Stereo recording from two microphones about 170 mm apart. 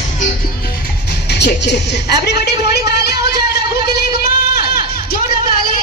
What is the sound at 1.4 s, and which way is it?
Speech, 80° left.